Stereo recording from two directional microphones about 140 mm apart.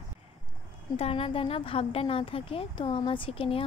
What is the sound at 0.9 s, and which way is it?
A woman's voice, 45° left (ahead or behind).